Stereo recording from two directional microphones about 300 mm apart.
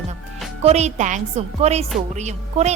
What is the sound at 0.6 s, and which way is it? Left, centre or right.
A woman's voice, right.